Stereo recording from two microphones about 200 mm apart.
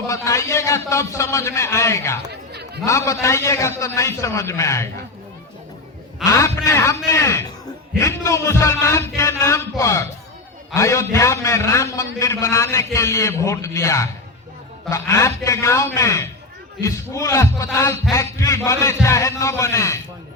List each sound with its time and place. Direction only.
0.1 s a man's voice: 15° left (ahead or behind)
2.3 s a sound: 55° right (ahead or behind)
2.8 s a man's voice: 15° left (ahead or behind)
6.2 s a man's voice: 15° left (ahead or behind)